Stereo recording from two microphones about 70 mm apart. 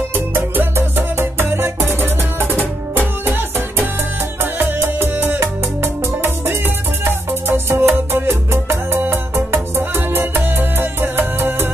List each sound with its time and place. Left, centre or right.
0.1 s music: right